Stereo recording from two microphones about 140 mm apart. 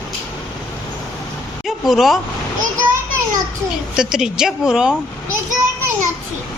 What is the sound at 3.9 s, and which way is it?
A woman's voice, 5° right (ahead or behind).